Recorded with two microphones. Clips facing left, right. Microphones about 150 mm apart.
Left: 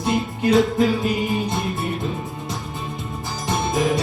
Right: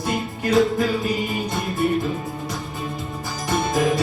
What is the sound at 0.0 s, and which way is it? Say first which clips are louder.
Music: left 4 dB; 20° left (ahead or behind).